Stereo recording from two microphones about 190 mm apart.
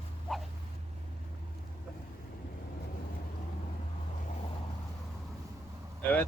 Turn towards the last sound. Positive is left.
turn(degrees=10)  # may be behind; listen again after turning